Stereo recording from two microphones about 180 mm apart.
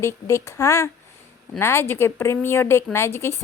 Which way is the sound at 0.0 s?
15° left (ahead or behind).